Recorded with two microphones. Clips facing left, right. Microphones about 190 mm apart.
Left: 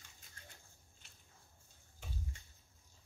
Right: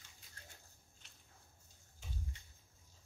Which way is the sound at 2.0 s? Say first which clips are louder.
Left 2 dB; 60° left (ahead or behind).